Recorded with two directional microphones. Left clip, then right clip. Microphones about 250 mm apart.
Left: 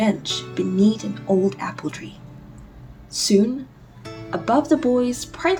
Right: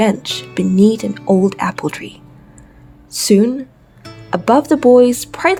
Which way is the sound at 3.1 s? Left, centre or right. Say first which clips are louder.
Right 6 dB; right.